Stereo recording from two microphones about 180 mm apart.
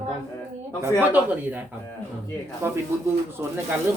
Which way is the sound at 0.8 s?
10° right (ahead or behind).